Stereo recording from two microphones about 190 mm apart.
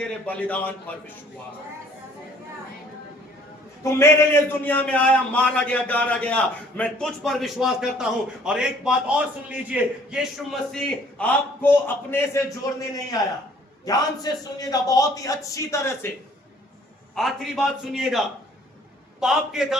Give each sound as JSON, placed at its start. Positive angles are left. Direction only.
{"t": 0.0, "sound": "a man's voice", "side_deg": 10}
{"t": 3.9, "sound": "a man's voice", "side_deg": 15}
{"t": 17.2, "sound": "a man's voice", "side_deg": 0}
{"t": 19.2, "sound": "a man's voice", "side_deg": 0}